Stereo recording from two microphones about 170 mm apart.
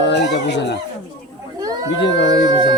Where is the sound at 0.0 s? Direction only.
90° left.